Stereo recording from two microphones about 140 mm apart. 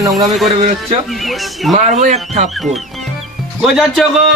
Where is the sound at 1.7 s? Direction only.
60° right (ahead or behind).